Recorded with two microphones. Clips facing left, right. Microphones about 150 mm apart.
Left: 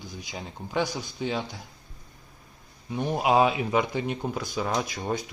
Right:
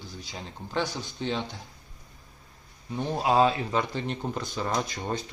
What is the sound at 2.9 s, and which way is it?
Speech, 15° left (ahead or behind).